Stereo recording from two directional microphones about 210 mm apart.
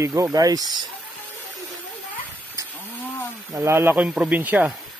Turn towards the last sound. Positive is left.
turn(degrees=-10)  # may be behind; listen again after turning